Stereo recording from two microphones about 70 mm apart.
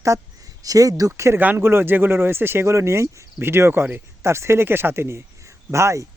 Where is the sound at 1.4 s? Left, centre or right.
Right.